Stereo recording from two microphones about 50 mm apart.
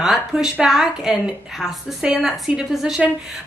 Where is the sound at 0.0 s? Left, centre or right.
Centre.